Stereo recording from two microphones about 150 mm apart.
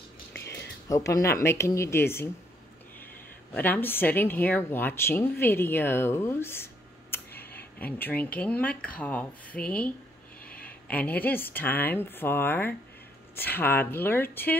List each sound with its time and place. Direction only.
0.8 s speech: 20° left (ahead or behind)
3.5 s speech: 10° left (ahead or behind)